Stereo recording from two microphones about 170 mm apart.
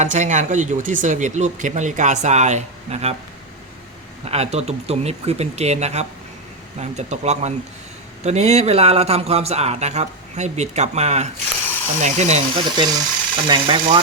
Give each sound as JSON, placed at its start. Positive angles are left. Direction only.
{"t": 0.0, "sound": "speech", "side_deg": -45}
{"t": 4.3, "sound": "a man's voice", "side_deg": -40}
{"t": 12.7, "sound": "speech", "side_deg": -25}